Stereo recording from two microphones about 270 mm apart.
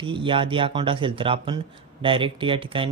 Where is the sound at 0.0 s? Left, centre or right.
Centre.